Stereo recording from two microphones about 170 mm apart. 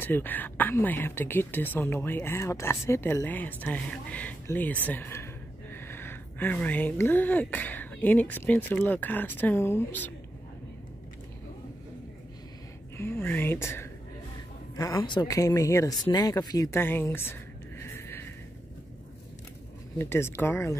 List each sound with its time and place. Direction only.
0.0 s speech: 10° left (ahead or behind)
12.9 s speech: 15° left (ahead or behind)
20.0 s speech: 15° left (ahead or behind)